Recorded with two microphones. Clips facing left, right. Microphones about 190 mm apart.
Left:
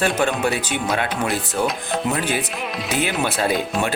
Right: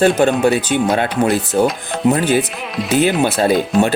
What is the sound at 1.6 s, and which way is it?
Tabla, 30° right (ahead or behind).